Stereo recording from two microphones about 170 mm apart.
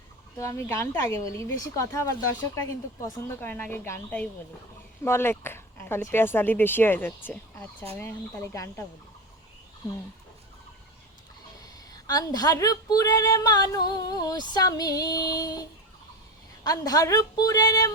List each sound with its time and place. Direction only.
0.3 s speech: 15° left (ahead or behind)
12.0 s a woman's voice: 20° left (ahead or behind)
16.6 s a woman's voice: 20° left (ahead or behind)